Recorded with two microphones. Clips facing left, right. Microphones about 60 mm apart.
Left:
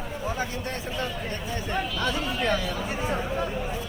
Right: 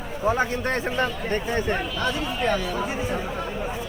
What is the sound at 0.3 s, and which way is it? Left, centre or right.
A man's voice, right.